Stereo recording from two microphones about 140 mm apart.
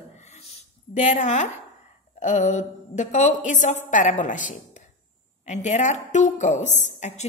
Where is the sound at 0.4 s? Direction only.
55° left (ahead or behind).